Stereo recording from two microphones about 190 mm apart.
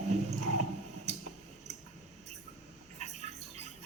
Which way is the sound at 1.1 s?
35° right (ahead or behind).